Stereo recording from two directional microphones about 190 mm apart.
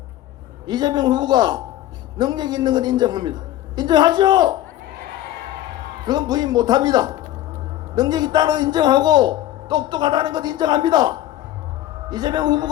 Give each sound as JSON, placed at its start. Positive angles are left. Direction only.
{"t": 0.7, "sound": "a man's voice", "side_deg": -20}
{"t": 6.1, "sound": "a man's voice", "side_deg": -20}